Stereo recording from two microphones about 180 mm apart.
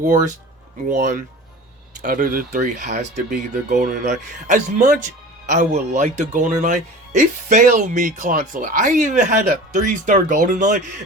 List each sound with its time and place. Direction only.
0.0 s speech: 45° right (ahead or behind)